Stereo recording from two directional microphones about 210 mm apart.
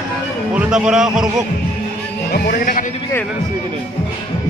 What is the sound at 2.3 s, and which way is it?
Music, 45° left (ahead or behind).